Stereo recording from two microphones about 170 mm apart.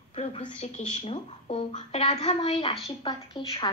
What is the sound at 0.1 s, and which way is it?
Speech, 35° left (ahead or behind).